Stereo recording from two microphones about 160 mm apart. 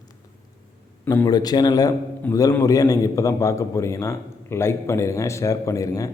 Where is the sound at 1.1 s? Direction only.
25° left (ahead or behind).